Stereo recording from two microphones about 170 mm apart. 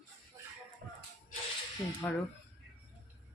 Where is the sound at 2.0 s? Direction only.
10° left (ahead or behind).